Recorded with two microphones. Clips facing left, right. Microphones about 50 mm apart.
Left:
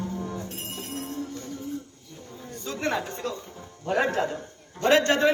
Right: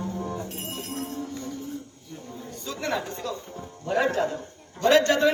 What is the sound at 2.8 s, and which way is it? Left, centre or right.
A man's voice, left.